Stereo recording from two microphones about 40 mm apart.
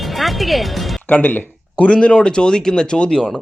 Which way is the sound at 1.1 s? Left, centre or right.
Left.